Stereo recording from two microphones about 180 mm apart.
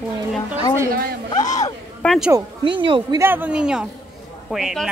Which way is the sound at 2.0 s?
Centre (ahead or behind).